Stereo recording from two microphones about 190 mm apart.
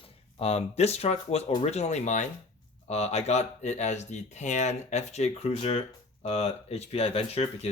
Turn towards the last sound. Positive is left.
turn(degrees=30)  # may be behind; listen again after turning